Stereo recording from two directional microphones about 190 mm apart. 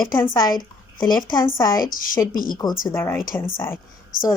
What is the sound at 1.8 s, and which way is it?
Speech, 45° left (ahead or behind).